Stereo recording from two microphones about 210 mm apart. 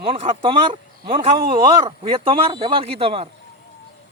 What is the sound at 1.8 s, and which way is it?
Speech, 25° right (ahead or behind).